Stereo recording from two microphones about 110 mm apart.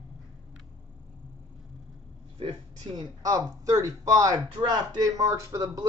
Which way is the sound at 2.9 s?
35° right (ahead or behind).